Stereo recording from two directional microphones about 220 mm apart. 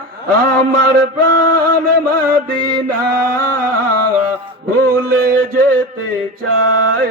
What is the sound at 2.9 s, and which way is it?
Chant, 40° right (ahead or behind).